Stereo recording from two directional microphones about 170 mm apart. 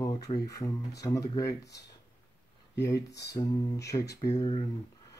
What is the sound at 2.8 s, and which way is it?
Speech, 20° left (ahead or behind).